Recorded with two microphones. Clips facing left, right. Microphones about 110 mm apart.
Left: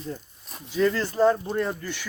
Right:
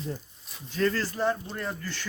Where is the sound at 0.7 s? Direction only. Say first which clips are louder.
Left 4 dB; 15° left (ahead or behind).